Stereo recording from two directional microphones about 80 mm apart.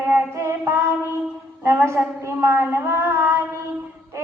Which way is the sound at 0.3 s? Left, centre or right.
Right.